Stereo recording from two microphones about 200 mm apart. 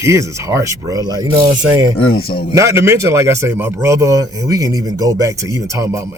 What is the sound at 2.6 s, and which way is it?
Speech, 15° right (ahead or behind).